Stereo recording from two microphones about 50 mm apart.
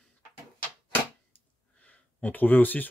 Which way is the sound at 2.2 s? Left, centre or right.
Left.